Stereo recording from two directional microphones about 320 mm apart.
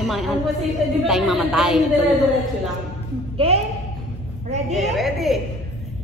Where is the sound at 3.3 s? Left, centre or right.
Centre.